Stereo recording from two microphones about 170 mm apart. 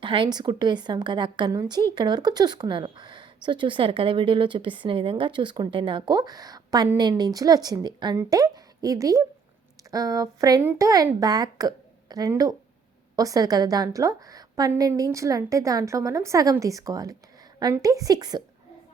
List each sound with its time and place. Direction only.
0.0 s speech: 30° right (ahead or behind)